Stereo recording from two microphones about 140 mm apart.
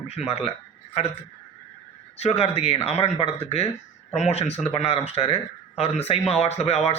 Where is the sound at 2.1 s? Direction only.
45° left (ahead or behind).